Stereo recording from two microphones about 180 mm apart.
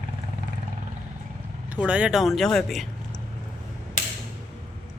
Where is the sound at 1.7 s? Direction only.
5° right (ahead or behind).